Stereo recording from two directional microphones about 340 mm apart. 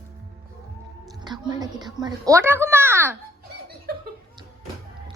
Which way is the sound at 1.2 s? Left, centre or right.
Centre.